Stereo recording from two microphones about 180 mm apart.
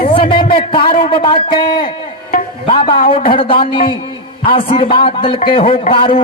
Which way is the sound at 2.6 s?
30° left (ahead or behind).